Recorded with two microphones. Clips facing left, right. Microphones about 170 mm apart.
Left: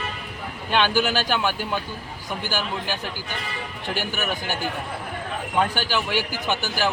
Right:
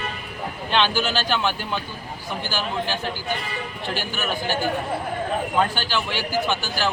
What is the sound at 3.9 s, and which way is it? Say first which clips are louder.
Speech: left 1 dB; 15° left (ahead or behind).